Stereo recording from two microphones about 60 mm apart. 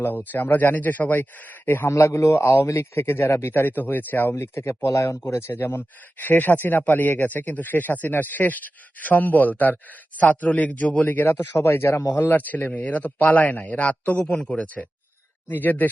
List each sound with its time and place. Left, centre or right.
0.0 s speech: left
1.9 s speech: left
2.7 s a man's voice: left
4.6 s speech: left
5.5 s a man's voice: left
11.6 s a man's voice: left
12.3 s a man's voice: left